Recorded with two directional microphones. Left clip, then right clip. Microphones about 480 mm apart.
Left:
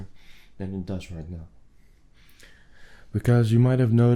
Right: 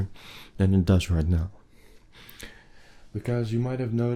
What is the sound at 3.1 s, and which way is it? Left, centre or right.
Speech, left.